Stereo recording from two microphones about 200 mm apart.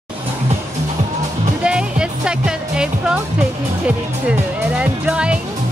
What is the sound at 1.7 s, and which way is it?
Music, 5° right (ahead or behind).